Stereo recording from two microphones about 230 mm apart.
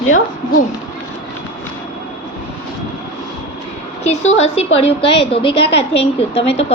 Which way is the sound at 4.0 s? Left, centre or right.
Left.